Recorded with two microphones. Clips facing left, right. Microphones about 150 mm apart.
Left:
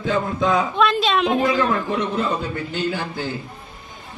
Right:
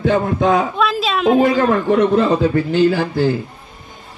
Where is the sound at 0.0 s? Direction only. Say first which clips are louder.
Right 6 dB; 60° right (ahead or behind).